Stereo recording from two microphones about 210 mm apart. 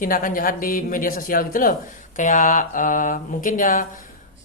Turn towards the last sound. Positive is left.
turn(degrees=40)  # may be behind; listen again after turning